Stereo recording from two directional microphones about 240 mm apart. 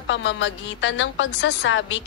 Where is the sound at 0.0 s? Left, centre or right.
Left.